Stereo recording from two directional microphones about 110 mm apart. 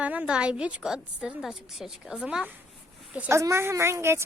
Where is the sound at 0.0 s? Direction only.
10° right (ahead or behind).